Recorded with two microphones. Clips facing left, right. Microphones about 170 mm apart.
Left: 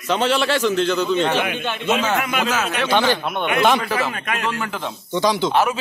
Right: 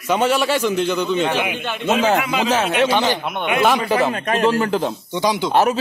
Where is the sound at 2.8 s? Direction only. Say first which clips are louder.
Even; 15° right (ahead or behind).